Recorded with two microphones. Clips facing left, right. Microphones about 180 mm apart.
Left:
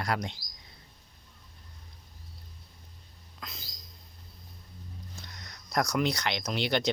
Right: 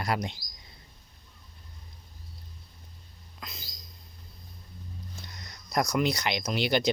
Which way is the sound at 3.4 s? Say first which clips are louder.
Right 1 dB; centre (ahead or behind).